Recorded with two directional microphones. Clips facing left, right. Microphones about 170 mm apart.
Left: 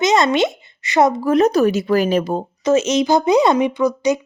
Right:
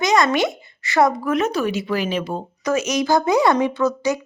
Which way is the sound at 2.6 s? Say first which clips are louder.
Left 4 dB; 25° left (ahead or behind).